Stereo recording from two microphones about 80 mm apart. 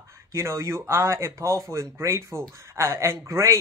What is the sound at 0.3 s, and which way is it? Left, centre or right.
Speech, right.